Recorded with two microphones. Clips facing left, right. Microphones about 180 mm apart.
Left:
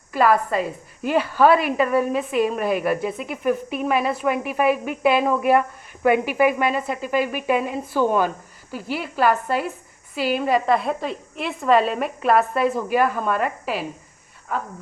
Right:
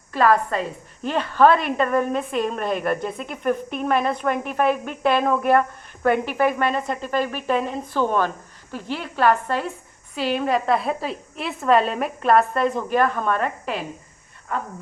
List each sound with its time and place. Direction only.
0.1 s a woman's voice: 5° left (ahead or behind)